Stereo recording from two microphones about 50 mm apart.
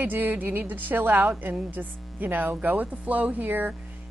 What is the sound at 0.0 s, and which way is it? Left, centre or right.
Speech, right.